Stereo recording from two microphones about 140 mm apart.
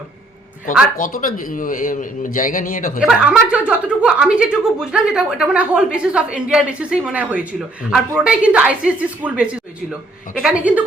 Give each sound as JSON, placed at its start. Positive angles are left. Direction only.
{"t": 0.9, "sound": "a man's voice", "side_deg": 75}
{"t": 3.0, "sound": "speech", "side_deg": -5}